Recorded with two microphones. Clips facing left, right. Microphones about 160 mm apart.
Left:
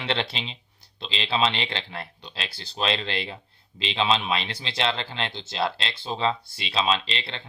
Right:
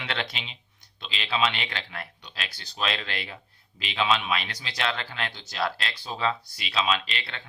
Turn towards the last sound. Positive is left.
turn(degrees=30)  # may be behind; listen again after turning